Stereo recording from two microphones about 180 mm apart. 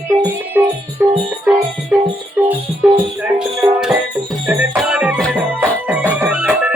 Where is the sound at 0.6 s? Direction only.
10° right (ahead or behind).